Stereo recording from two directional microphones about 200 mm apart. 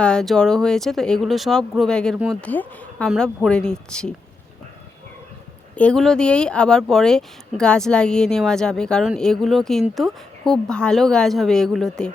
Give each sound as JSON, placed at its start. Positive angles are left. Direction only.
{"t": 0.0, "sound": "speech", "side_deg": 5}
{"t": 2.4, "sound": "speech", "side_deg": 10}
{"t": 5.7, "sound": "speech", "side_deg": 5}